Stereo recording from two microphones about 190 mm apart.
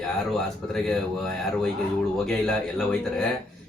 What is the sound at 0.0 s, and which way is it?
Speech, centre (ahead or behind).